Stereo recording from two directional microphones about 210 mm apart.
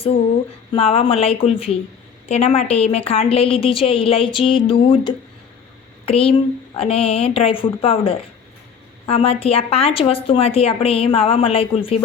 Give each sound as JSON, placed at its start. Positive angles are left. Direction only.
{"t": 0.7, "sound": "a woman's voice", "side_deg": 30}